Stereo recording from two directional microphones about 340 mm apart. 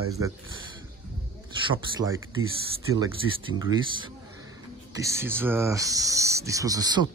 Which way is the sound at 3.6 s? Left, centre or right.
Centre.